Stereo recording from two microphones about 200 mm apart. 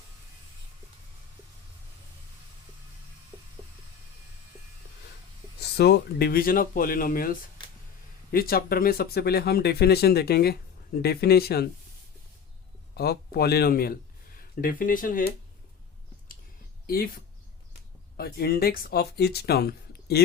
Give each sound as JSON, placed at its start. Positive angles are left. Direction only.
{"t": 5.5, "sound": "speech", "side_deg": 55}
{"t": 12.9, "sound": "speech", "side_deg": 50}
{"t": 16.8, "sound": "speech", "side_deg": 45}
{"t": 18.2, "sound": "speech", "side_deg": 50}